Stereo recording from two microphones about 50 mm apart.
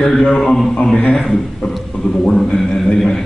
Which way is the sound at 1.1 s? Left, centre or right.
Centre.